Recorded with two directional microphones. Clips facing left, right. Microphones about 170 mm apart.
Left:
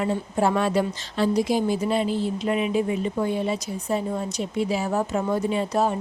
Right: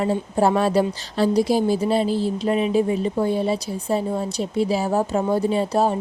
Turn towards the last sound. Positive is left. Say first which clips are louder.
# right 3 dB
turn(degrees=-35)  # may be behind; listen again after turning